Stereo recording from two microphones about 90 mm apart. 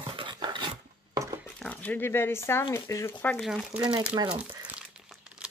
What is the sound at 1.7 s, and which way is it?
Speech, 20° left (ahead or behind).